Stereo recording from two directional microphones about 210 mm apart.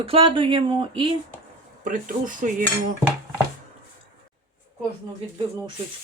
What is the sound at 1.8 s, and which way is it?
Speech, 40° right (ahead or behind).